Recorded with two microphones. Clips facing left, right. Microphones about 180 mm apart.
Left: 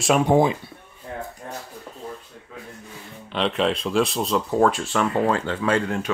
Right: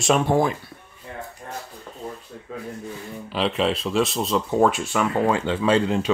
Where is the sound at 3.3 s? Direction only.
5° right (ahead or behind); by 6.1 s 20° right (ahead or behind).